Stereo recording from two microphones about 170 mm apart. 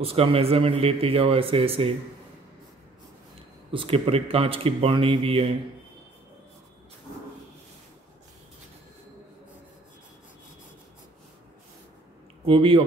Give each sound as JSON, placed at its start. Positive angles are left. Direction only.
{"t": 0.0, "sound": "speech", "side_deg": -35}
{"t": 3.7, "sound": "speech", "side_deg": -30}
{"t": 12.4, "sound": "speech", "side_deg": -30}